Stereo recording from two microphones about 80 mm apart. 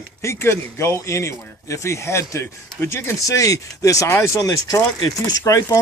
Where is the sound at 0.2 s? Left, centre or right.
Left.